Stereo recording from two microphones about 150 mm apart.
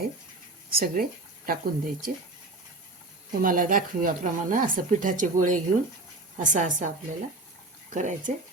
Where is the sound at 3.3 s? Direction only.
70° right (ahead or behind).